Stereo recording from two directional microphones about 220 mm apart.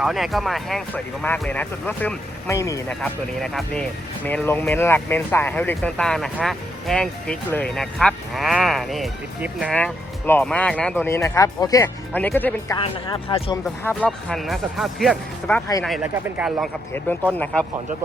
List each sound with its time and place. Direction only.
0.0 s speech: centre (ahead or behind)
3.0 s speech: 5° left (ahead or behind)
12.8 s speech: 25° left (ahead or behind)
13.8 s speech: 5° left (ahead or behind)
17.3 s speech: 5° left (ahead or behind)